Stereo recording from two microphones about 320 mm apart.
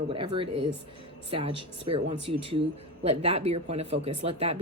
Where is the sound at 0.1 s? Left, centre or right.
Centre.